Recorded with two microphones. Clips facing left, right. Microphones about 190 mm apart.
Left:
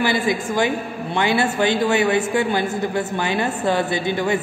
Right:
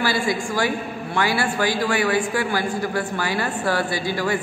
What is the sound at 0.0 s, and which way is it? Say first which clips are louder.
A woman's voice: left 2 dB; 20° left (ahead or behind).